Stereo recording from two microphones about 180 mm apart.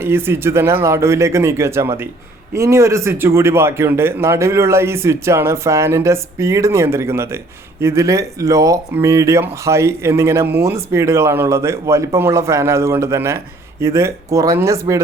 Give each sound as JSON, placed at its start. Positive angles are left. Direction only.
{"t": 0.0, "sound": "speech", "side_deg": -10}